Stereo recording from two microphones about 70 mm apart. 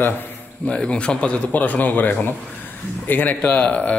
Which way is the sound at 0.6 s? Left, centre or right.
Centre.